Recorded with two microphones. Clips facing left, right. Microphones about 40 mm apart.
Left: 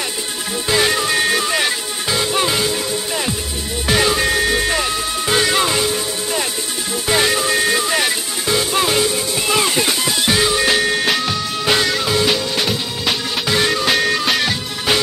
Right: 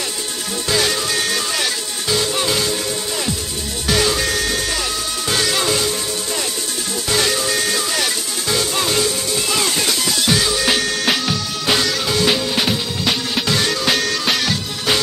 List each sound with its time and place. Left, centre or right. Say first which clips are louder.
0.7 s music: left 3 dB; centre
3.8 s music: left 2 dB; centre
7.1 s music: left 3 dB; left
12.3 s music: even; centre
13.5 s music: left 3 dB; centre